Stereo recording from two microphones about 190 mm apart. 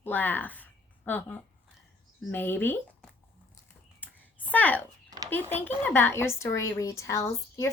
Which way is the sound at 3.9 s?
10° left (ahead or behind).